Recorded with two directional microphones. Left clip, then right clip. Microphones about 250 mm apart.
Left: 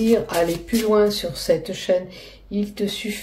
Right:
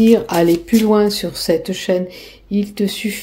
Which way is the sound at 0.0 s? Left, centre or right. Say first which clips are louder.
Right 6 dB; right.